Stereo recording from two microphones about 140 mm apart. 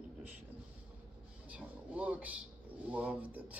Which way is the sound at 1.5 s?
10° right (ahead or behind).